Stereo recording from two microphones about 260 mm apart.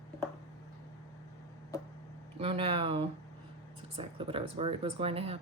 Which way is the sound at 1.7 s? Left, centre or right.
Centre.